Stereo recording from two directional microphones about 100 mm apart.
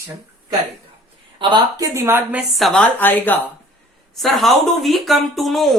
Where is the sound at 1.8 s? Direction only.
25° right (ahead or behind).